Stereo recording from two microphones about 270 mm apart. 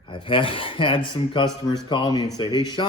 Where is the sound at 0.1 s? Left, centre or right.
Centre.